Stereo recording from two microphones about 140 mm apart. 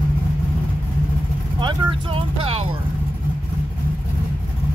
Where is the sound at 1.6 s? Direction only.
35° right (ahead or behind).